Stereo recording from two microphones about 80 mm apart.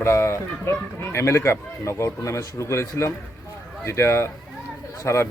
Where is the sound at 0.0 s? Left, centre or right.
Left.